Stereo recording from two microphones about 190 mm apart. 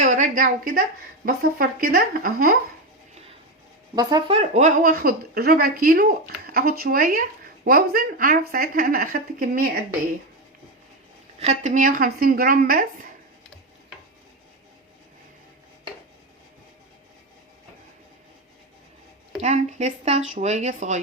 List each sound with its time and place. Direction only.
0.0 s speech: 40° right (ahead or behind)
3.9 s speech: 25° right (ahead or behind); by 9.8 s 50° right (ahead or behind)
11.3 s speech: 35° right (ahead or behind)
19.4 s speech: 35° right (ahead or behind)